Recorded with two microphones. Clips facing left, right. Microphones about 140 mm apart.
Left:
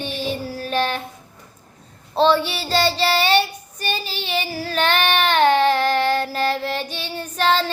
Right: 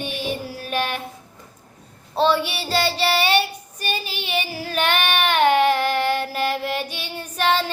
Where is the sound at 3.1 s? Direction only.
10° right (ahead or behind).